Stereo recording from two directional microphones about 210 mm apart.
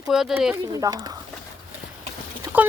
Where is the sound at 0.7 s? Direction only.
15° right (ahead or behind).